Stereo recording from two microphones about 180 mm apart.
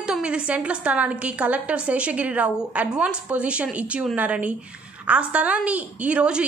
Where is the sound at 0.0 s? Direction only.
5° right (ahead or behind).